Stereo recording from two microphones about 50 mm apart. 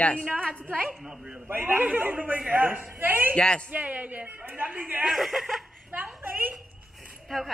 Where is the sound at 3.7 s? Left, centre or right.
Right.